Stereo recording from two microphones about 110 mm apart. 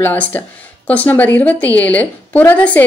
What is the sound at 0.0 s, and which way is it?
A woman's voice, 15° left (ahead or behind).